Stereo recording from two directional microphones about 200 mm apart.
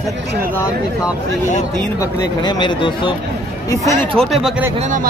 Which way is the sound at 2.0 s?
20° left (ahead or behind).